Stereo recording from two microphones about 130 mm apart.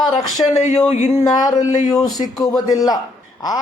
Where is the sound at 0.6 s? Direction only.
60° left (ahead or behind).